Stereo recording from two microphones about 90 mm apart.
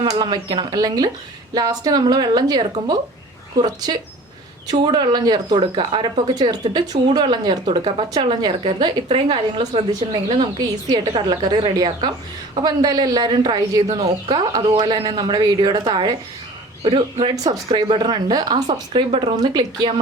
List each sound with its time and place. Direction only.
0.0 s a woman's voice: 55° right (ahead or behind)
5.5 s speech: 65° right (ahead or behind)
10.8 s a woman's voice: 50° right (ahead or behind)
16.8 s speech: 65° right (ahead or behind)
17.3 s speech: 40° right (ahead or behind)
17.8 s speech: 65° right (ahead or behind)